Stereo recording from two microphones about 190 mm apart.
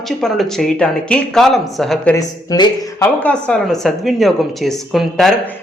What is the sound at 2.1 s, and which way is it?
Speech, 20° left (ahead or behind).